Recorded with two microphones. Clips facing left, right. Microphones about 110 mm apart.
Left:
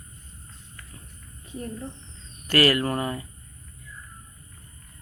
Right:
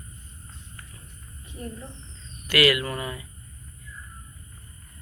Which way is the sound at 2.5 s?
40° left (ahead or behind).